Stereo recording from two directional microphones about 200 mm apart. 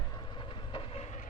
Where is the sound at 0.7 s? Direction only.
30° left (ahead or behind).